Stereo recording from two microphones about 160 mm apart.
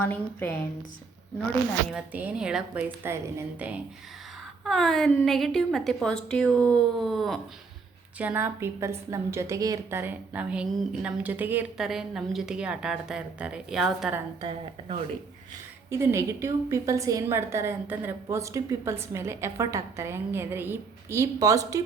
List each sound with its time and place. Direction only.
0.0 s a woman's voice: 10° left (ahead or behind)
1.9 s a woman's voice: 10° right (ahead or behind)
4.6 s a woman's voice: centre (ahead or behind)
8.2 s a woman's voice: 10° right (ahead or behind)
15.9 s a woman's voice: 15° right (ahead or behind)